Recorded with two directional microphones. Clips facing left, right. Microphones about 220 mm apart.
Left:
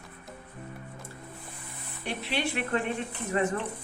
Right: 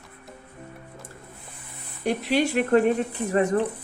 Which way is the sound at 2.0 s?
40° right (ahead or behind).